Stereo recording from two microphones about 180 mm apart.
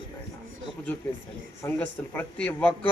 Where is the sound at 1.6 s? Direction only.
10° left (ahead or behind).